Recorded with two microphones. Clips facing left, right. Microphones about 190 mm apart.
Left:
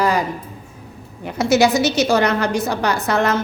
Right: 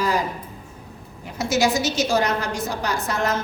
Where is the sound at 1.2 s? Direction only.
65° left (ahead or behind).